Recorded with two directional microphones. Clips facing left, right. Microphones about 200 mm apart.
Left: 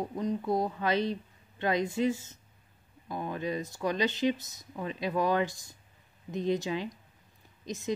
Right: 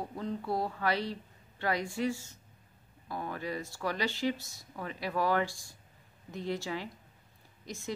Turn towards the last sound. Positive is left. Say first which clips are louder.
# left 6 dB
turn(degrees=20)  # may be behind; listen again after turning